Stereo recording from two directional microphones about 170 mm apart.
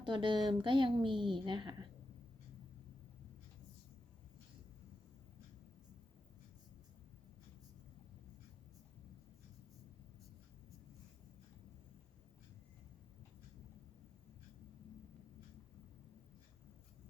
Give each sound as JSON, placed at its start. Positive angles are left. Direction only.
{"t": 0.0, "sound": "a woman's voice", "side_deg": -30}